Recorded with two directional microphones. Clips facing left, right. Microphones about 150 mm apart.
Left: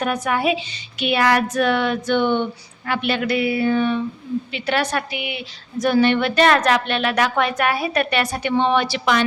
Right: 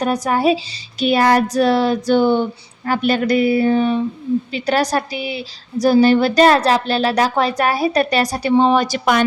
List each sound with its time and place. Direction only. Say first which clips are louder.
0.0 s a woman's voice: right 4 dB; 35° right (ahead or behind)